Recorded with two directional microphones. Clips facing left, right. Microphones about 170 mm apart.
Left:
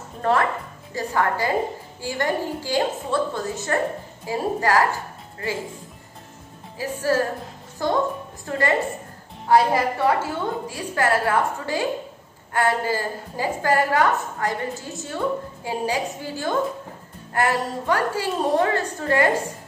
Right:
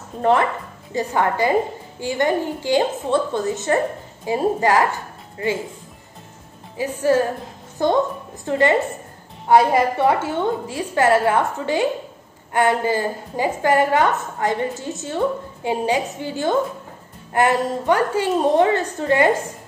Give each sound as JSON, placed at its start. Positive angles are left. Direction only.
{"t": 0.2, "sound": "a woman's voice", "side_deg": -20}
{"t": 6.8, "sound": "a woman's voice", "side_deg": -20}